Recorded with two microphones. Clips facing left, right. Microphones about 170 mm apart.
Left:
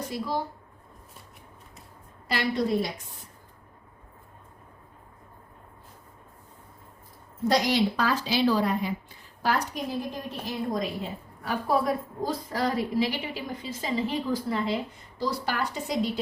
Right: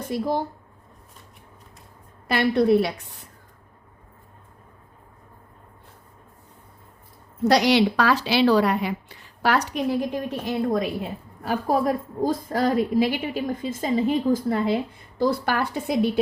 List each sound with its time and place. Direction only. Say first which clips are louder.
0.1 s a woman's voice: right 8 dB; 50° right (ahead or behind)
2.2 s a woman's voice: right 7 dB; 55° right (ahead or behind)
7.4 s a woman's voice: right 5 dB; 75° right (ahead or behind)
10.4 s a woman's voice: right 5 dB; 65° right (ahead or behind)